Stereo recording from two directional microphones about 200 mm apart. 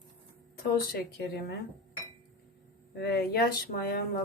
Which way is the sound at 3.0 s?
50° left (ahead or behind).